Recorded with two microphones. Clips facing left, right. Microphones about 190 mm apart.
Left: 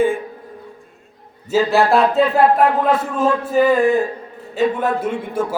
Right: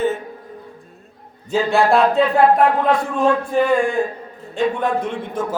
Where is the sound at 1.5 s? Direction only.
5° left (ahead or behind).